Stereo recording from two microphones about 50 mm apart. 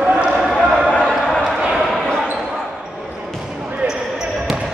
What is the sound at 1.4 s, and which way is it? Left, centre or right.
Basketball bounce, centre.